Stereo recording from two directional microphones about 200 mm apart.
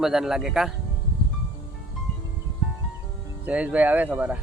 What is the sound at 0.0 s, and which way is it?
Speech, centre (ahead or behind).